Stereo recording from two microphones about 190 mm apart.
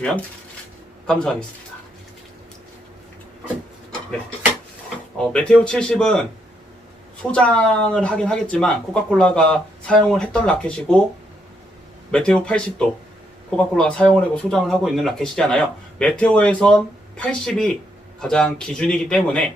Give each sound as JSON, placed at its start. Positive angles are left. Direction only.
{"t": 1.0, "sound": "speech", "side_deg": 5}
{"t": 5.1, "sound": "speech", "side_deg": 5}
{"t": 12.1, "sound": "speech", "side_deg": 5}